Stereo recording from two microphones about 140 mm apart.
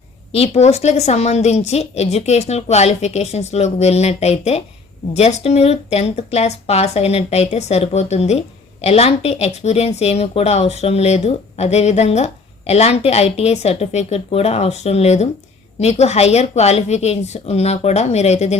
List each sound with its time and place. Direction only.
0.3 s speech: 45° left (ahead or behind)